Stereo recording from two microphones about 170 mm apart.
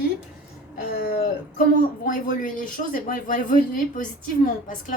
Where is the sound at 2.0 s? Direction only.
50° left (ahead or behind).